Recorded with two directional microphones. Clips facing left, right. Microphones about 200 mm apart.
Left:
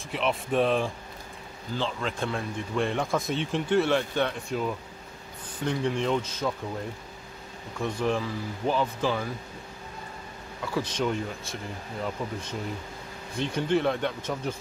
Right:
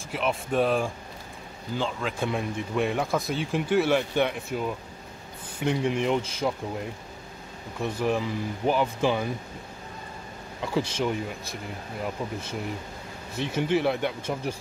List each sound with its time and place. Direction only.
0.1 s speech: centre (ahead or behind)
2.0 s speech: 5° right (ahead or behind)
7.8 s speech: 15° right (ahead or behind)
10.6 s speech: 15° right (ahead or behind)